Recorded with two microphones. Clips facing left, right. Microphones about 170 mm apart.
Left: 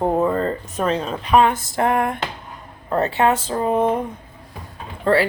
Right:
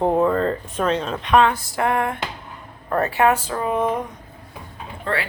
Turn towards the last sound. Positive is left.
turn(degrees=35)  # may be behind; listen again after turning